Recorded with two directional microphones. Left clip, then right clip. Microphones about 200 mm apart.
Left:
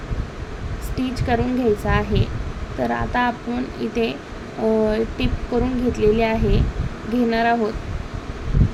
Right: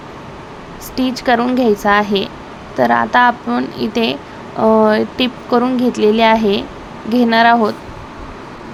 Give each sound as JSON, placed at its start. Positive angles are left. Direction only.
{"t": 0.9, "sound": "speech", "side_deg": -15}